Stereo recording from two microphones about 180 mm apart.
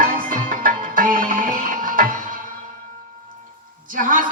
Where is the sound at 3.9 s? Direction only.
50° right (ahead or behind).